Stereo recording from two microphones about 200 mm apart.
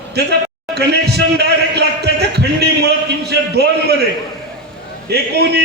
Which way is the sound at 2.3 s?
55° right (ahead or behind).